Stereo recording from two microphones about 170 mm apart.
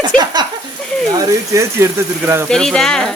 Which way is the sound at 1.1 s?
15° right (ahead or behind).